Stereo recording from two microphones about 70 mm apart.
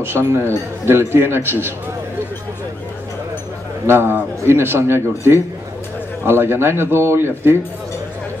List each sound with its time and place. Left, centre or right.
0.0 s speech: right
3.8 s speech: right